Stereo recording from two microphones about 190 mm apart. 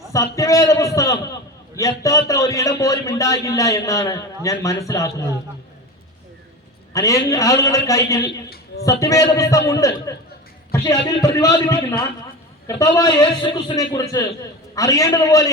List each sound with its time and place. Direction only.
0.1 s a man's voice: 15° left (ahead or behind)
6.9 s a man's voice: 15° left (ahead or behind)
8.3 s a sound: 55° left (ahead or behind)
8.8 s a man's voice: 15° left (ahead or behind)